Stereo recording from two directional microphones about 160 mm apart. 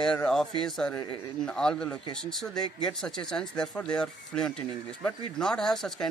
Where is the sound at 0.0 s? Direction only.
5° left (ahead or behind).